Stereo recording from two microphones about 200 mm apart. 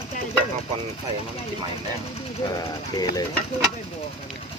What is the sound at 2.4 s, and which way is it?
Speech, 20° left (ahead or behind).